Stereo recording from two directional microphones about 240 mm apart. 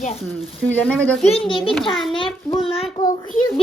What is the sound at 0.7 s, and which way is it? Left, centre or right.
Speech, centre.